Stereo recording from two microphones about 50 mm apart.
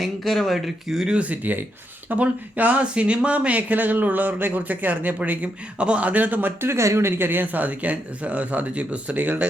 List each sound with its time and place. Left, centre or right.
0.0 s speech: centre
1.1 s speech: right
6.6 s speech: right
7.3 s speech: right